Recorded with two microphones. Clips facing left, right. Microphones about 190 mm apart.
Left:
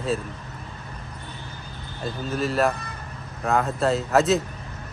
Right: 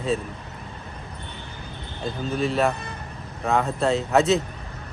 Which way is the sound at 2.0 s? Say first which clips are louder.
Right 1 dB; centre (ahead or behind).